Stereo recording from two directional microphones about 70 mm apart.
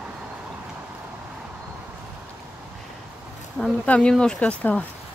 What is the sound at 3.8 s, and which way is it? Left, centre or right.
Speech, centre.